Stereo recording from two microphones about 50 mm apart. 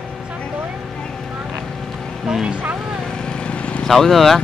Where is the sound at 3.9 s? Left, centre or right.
Centre.